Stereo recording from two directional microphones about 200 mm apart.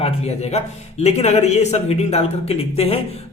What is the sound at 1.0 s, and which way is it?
A man's voice, 30° left (ahead or behind).